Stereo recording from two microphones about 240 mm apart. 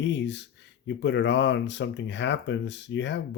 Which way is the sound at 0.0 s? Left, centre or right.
Left.